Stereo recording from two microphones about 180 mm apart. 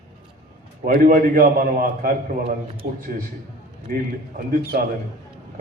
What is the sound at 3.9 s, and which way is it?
Speech, 55° right (ahead or behind).